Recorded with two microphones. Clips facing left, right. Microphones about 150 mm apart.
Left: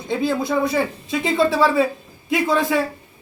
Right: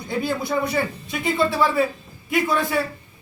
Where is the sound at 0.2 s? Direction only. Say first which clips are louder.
Left 2 dB; 90° left.